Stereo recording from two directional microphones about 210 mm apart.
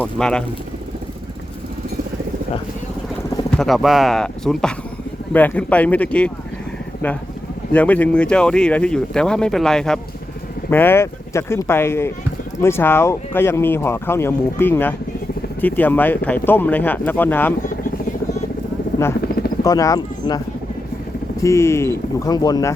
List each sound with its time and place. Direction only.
0.0 s speech: 5° left (ahead or behind)
3.6 s speech: centre (ahead or behind)
7.7 s speech: 5° left (ahead or behind)
17.6 s helicopter: 40° left (ahead or behind)
19.0 s speech: 15° left (ahead or behind)
21.4 s speech: 15° left (ahead or behind)